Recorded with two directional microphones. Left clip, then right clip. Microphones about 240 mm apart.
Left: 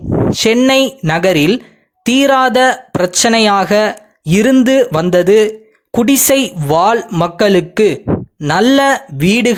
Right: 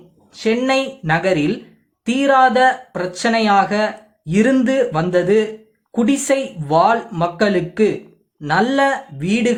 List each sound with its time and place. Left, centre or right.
0.3 s speech: left